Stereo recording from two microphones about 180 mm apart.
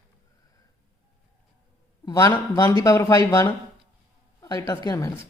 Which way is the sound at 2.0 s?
20° left (ahead or behind).